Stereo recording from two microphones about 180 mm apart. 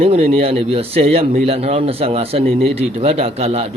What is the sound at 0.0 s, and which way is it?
A man's voice, 35° right (ahead or behind).